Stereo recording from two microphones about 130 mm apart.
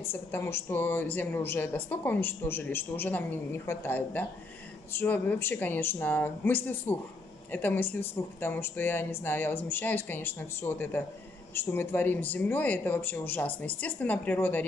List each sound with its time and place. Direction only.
0.1 s a woman's voice: 15° left (ahead or behind)